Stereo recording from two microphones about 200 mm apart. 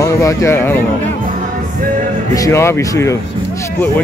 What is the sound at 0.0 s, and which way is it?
Speech, 15° left (ahead or behind).